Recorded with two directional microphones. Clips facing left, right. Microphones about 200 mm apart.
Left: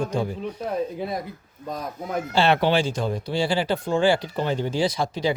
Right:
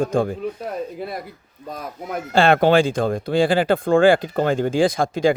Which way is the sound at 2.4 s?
50° right (ahead or behind).